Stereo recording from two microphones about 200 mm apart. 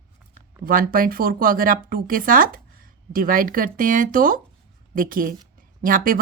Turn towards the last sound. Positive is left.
turn(degrees=-45)  # may be behind; listen again after turning